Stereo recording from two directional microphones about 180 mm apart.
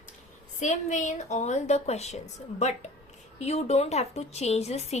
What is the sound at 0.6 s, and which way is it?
A woman's voice, 45° left (ahead or behind).